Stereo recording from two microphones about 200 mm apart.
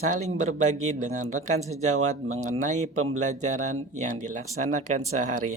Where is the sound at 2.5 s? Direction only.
40° right (ahead or behind).